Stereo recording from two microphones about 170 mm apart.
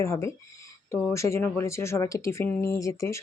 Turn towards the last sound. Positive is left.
turn(degrees=20)  # may be behind; listen again after turning